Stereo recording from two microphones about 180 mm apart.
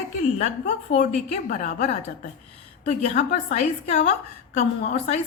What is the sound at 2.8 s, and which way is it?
A woman's voice, 40° left (ahead or behind).